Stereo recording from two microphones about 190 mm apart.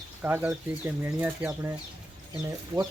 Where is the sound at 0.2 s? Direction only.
10° right (ahead or behind).